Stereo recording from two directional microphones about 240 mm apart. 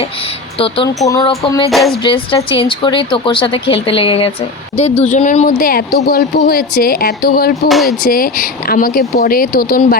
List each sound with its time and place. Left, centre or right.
1.0 s speech: centre; by 7.7 s left
7.7 s speech: centre
8.1 s speech: left